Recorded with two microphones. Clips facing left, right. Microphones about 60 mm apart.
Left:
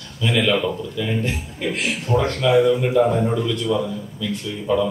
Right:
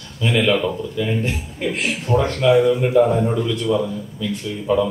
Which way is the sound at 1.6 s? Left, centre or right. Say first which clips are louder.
Right 1 dB; centre.